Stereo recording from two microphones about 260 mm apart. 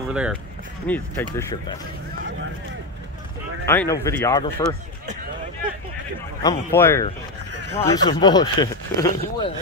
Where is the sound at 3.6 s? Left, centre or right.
Centre.